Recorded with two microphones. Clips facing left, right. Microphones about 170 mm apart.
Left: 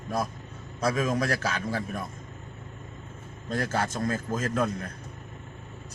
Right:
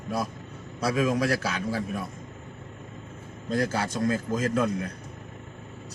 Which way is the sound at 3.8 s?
10° right (ahead or behind).